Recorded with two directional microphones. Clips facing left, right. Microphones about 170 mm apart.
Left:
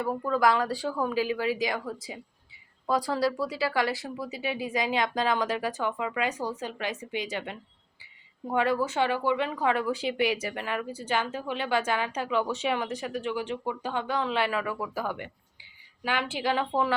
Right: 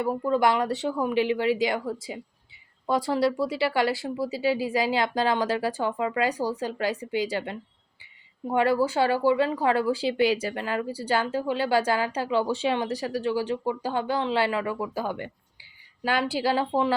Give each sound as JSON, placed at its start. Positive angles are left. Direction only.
{"t": 0.3, "sound": "speech", "side_deg": -25}
{"t": 8.5, "sound": "speech", "side_deg": -30}